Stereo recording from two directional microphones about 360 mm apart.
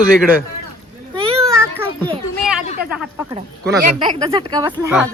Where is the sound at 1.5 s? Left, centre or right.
Centre.